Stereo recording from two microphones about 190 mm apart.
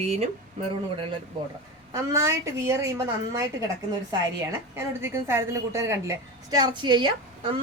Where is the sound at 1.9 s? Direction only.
15° right (ahead or behind).